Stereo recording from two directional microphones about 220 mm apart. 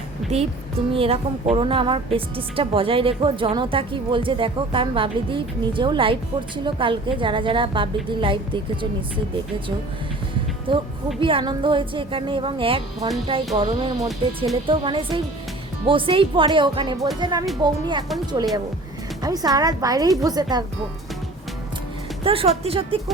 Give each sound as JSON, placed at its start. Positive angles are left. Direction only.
{"t": 0.3, "sound": "a woman's voice", "side_deg": -30}
{"t": 10.7, "sound": "a woman's voice", "side_deg": -20}
{"t": 19.2, "sound": "a woman's voice", "side_deg": -15}
{"t": 22.2, "sound": "a woman's voice", "side_deg": -25}